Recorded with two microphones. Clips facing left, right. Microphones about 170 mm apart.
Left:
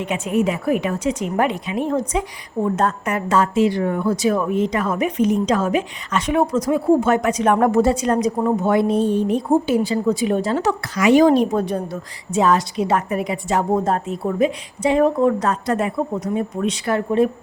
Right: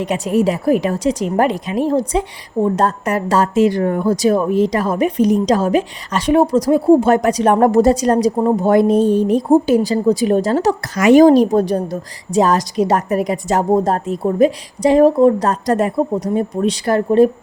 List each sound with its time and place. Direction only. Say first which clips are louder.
0.0 s a woman's voice: right 4 dB; 35° right (ahead or behind)